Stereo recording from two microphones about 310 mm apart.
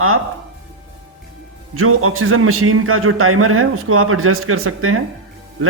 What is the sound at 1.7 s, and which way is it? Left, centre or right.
A man's voice, right.